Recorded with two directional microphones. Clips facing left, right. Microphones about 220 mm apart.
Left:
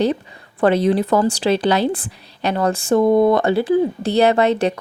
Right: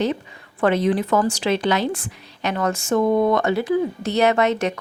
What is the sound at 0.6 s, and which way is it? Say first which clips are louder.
A woman's voice: left 3 dB; 35° left (ahead or behind).